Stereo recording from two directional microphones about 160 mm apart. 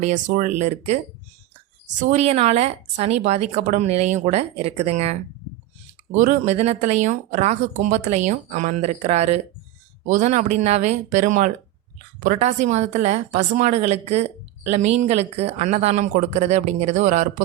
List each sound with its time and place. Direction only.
0.0 s a woman's voice: 50° right (ahead or behind)
2.0 s a woman's voice: 45° right (ahead or behind)
6.1 s a woman's voice: 55° right (ahead or behind)